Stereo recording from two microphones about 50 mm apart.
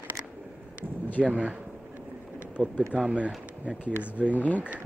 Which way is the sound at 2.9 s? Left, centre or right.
Right.